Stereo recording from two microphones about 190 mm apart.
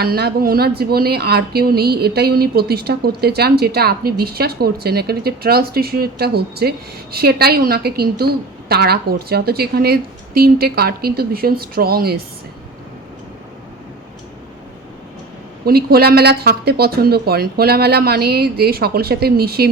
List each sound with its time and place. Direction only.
0.0 s speech: 55° right (ahead or behind)
15.6 s speech: 55° right (ahead or behind)